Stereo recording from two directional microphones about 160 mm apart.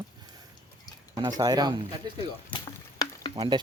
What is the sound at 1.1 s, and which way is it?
Speech, 25° right (ahead or behind).